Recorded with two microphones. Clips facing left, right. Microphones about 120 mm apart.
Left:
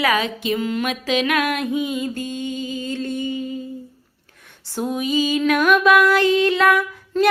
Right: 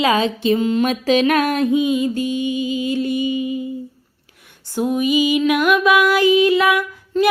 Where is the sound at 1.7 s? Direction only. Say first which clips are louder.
Right 6 dB; 20° right (ahead or behind).